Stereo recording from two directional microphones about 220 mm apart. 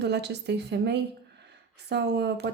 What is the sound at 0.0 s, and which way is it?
Speech, 50° right (ahead or behind).